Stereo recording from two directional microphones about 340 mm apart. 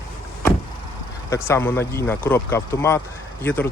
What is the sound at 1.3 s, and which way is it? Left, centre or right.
Speech, centre.